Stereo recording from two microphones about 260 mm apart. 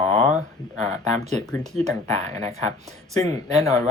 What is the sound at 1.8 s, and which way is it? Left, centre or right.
Speech, right.